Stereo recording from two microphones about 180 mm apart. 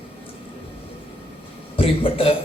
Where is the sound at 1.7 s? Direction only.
30° left (ahead or behind).